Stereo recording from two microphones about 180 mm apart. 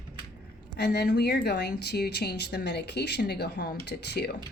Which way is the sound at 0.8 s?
70° left (ahead or behind).